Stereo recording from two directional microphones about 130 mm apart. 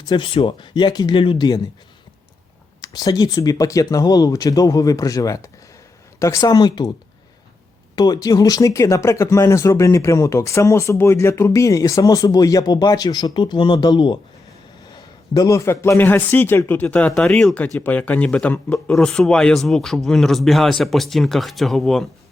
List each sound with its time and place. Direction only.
0.0 s speech: 35° left (ahead or behind)
2.8 s speech: 30° left (ahead or behind)
7.9 s speech: 30° left (ahead or behind); by 22.1 s centre (ahead or behind)